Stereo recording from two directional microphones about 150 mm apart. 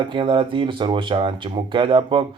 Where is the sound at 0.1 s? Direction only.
35° right (ahead or behind).